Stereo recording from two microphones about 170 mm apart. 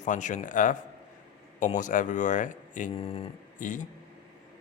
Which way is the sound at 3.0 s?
35° left (ahead or behind).